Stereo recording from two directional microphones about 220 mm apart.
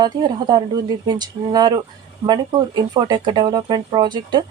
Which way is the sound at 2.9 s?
20° right (ahead or behind).